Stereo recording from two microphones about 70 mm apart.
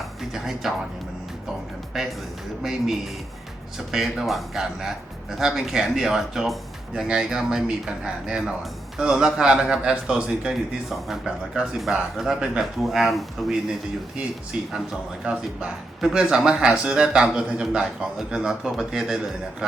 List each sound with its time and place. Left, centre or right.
0.0 s music: centre
2.0 s speech: centre
3.8 s speech: centre
14.5 s speech: centre
16.0 s speech: centre